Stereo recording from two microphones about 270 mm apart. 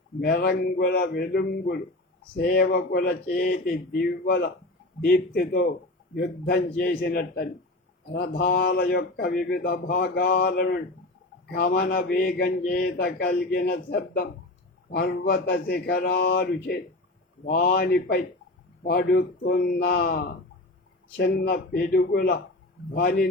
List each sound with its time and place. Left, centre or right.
0.2 s speech: left